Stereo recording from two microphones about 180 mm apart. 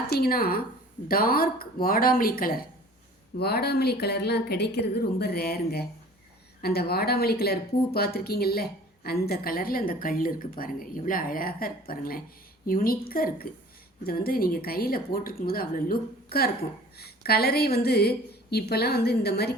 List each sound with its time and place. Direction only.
0.1 s a woman's voice: 55° left (ahead or behind)